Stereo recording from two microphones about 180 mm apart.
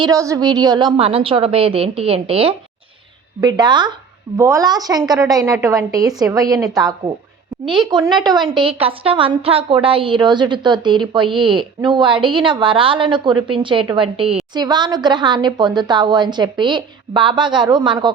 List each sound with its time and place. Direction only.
0.0 s a woman's voice: 20° right (ahead or behind)